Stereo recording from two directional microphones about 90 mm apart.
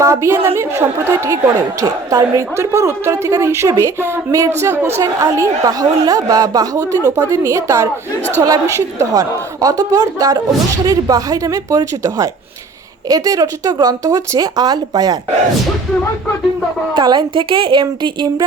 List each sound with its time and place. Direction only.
0.0 s a woman's voice: 35° right (ahead or behind)
1.8 s a woman's voice: 40° right (ahead or behind)
5.2 s a woman's voice: 40° right (ahead or behind)
16.9 s a woman's voice: 55° right (ahead or behind)